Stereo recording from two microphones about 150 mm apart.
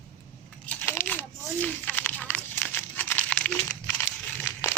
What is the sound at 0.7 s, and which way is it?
Crumpling, 10° left (ahead or behind).